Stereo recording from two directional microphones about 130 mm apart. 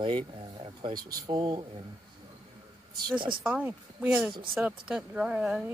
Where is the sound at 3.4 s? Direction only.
10° right (ahead or behind).